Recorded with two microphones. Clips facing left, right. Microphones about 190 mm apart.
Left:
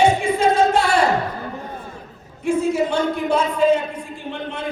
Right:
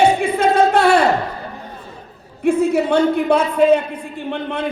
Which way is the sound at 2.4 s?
60° right (ahead or behind).